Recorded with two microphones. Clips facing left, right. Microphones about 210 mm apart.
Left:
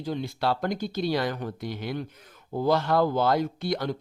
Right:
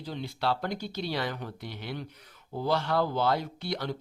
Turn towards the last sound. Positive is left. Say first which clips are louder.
# left 6 dB
turn(degrees=45)  # may be behind; listen again after turning